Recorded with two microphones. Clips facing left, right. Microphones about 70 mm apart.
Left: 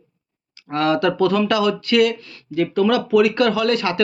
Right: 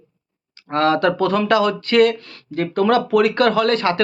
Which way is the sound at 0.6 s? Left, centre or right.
Right.